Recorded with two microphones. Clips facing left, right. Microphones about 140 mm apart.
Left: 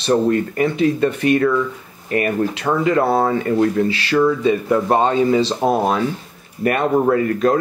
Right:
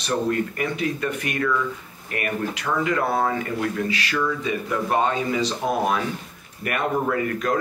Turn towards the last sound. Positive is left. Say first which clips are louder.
# left 7 dB
turn(degrees=35)  # may be behind; listen again after turning